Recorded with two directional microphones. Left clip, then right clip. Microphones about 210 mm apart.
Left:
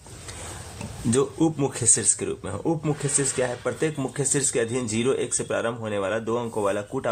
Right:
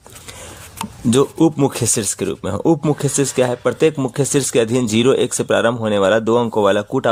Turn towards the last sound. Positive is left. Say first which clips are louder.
# right 10 dB
turn(degrees=-50)  # may be behind; listen again after turning